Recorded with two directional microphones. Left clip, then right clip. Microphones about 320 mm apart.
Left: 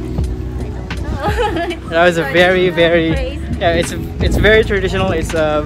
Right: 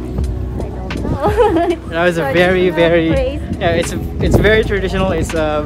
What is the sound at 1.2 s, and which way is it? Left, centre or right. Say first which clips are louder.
Speech: right 5 dB; right.